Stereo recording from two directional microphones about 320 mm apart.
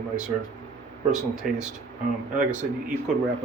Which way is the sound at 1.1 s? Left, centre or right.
Centre.